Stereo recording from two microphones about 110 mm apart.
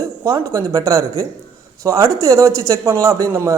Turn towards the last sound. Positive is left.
turn(degrees=-30)  # may be behind; listen again after turning